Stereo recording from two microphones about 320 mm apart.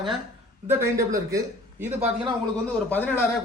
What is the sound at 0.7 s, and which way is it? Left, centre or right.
Speech, centre.